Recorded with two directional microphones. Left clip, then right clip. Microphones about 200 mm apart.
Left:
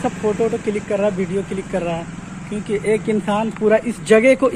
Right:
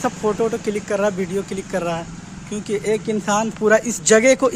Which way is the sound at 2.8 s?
15° right (ahead or behind).